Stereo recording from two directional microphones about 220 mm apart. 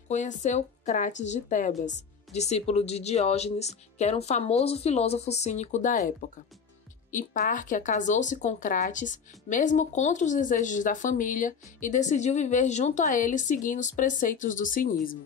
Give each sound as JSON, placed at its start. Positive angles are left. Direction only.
{"t": 0.1, "sound": "a woman's voice", "side_deg": 35}